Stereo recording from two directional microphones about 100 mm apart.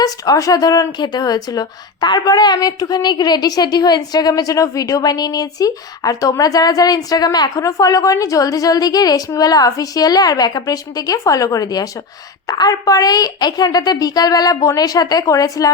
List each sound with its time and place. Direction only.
0.0 s a woman's voice: 35° left (ahead or behind)